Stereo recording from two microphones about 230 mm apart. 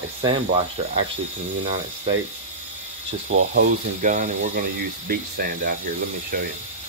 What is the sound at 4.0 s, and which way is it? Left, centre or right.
Speech, right.